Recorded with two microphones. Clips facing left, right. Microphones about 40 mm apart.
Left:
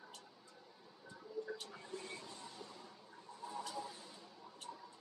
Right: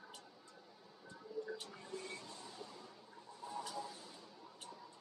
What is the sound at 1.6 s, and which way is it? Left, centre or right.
Music, centre.